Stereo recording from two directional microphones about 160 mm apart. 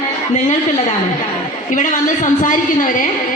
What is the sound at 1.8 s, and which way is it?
A woman's voice, 55° left (ahead or behind).